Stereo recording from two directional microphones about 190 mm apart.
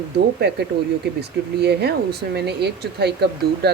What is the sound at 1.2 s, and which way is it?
Speech, 60° right (ahead or behind).